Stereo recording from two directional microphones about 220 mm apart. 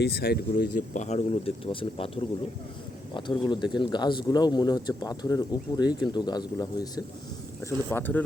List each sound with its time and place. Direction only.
0.0 s speech: 45° left (ahead or behind)
0.9 s speech: 30° left (ahead or behind)
3.2 s speech: 20° left (ahead or behind)